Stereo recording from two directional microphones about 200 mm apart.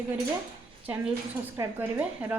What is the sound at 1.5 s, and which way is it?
Speech, 15° right (ahead or behind).